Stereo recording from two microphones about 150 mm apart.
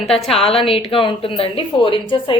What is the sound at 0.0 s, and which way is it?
Speech, centre (ahead or behind).